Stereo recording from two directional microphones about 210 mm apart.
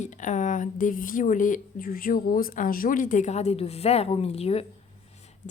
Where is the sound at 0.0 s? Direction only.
35° left (ahead or behind).